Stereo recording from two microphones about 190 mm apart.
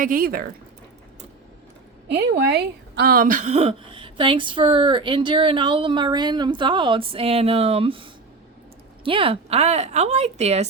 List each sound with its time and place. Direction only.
0.0 s speech: 50° right (ahead or behind)
2.0 s speech: 65° right (ahead or behind); by 10.7 s 35° right (ahead or behind)